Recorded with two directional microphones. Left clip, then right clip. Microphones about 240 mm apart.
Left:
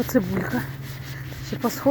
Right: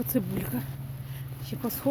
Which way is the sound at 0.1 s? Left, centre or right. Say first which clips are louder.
Left 8 dB; centre.